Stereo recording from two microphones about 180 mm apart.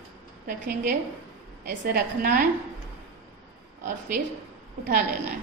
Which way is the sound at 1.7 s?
55° right (ahead or behind).